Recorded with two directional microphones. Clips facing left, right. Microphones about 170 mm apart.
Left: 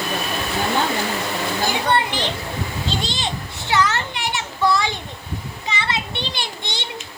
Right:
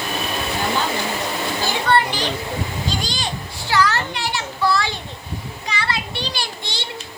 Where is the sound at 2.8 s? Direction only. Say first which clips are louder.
Even; 25° left (ahead or behind).